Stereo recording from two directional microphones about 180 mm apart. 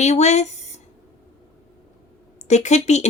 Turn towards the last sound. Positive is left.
turn(degrees=40)  # may be behind; listen again after turning